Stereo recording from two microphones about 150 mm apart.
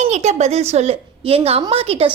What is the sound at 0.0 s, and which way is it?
A woman's voice, 50° right (ahead or behind).